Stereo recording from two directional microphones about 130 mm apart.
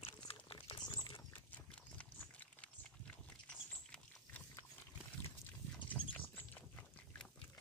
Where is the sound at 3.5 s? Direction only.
10° left (ahead or behind).